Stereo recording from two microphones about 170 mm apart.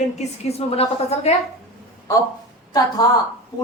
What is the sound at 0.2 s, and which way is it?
A man's voice, 40° left (ahead or behind).